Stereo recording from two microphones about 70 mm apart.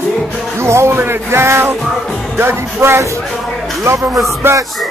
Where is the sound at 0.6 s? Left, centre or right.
Right.